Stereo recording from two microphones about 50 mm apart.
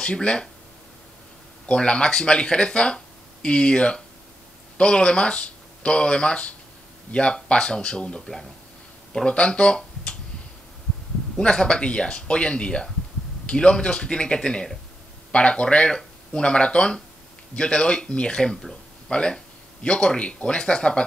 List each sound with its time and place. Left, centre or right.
0.0 s speech: centre
1.7 s speech: centre
11.3 s speech: centre